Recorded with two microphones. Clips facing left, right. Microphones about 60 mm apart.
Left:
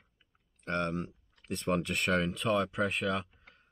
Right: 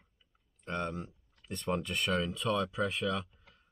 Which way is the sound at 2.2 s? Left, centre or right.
Left.